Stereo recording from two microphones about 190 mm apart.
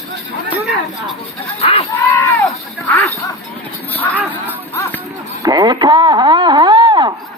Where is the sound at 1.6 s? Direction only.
30° left (ahead or behind).